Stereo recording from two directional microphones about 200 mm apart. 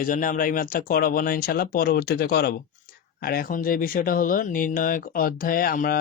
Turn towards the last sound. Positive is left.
turn(degrees=45)  # may be behind; listen again after turning